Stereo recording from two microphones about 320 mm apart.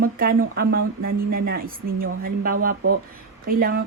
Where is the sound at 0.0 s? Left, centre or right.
Right.